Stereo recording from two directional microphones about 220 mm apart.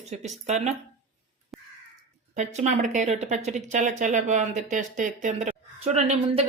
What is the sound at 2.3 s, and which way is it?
Speech, 30° right (ahead or behind).